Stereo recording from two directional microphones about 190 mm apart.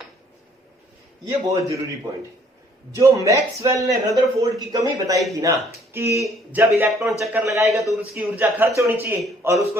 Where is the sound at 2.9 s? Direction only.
15° right (ahead or behind).